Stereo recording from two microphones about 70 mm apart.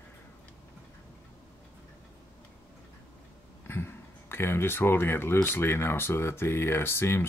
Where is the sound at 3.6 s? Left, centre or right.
Left.